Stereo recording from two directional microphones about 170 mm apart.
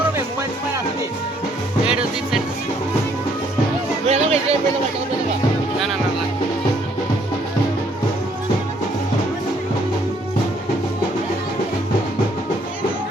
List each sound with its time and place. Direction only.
1.9 s music: 5° right (ahead or behind)
4.1 s music: 40° right (ahead or behind)